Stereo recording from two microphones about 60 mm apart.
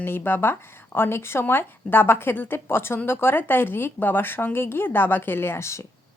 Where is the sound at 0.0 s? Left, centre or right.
Left.